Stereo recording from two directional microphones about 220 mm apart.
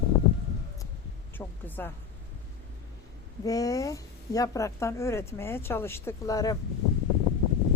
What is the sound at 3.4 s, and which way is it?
A woman's voice, 15° left (ahead or behind).